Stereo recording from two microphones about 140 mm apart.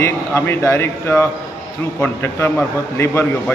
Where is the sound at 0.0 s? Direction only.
15° left (ahead or behind).